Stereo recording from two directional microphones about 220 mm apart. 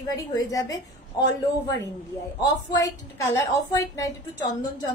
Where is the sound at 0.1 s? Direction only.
15° left (ahead or behind).